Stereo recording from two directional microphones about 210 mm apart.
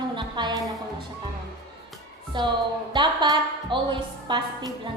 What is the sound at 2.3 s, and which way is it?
A woman's voice, 20° right (ahead or behind).